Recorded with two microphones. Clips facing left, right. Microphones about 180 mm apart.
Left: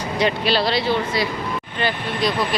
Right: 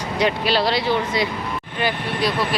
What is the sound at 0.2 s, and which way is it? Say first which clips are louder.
Speech: even; 10° right (ahead or behind).